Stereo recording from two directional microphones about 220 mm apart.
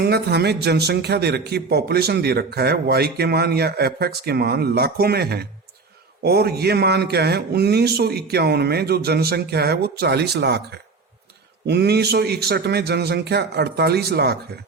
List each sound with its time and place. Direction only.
0.0 s speech: 45° right (ahead or behind)